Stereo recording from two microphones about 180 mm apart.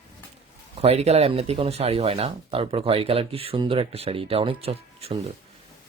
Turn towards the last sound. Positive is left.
turn(degrees=-35)  # may be behind; listen again after turning